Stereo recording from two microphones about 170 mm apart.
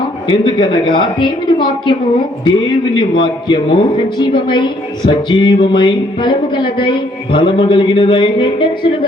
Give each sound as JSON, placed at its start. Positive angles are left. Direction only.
{"t": 0.3, "sound": "speech", "side_deg": 30}